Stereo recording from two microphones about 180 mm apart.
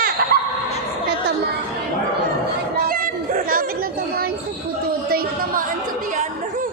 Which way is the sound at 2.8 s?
50° right (ahead or behind).